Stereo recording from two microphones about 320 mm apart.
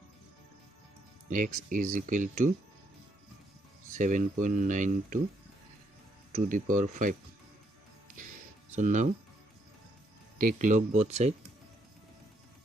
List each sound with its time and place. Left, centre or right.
1.3 s speech: right
3.9 s speech: right
6.3 s speech: right
8.7 s speech: right
10.4 s speech: right